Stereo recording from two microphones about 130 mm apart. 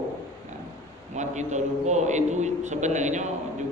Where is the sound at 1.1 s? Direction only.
65° right (ahead or behind).